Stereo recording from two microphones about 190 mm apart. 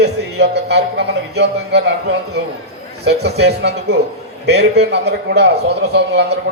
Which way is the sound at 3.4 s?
60° right (ahead or behind).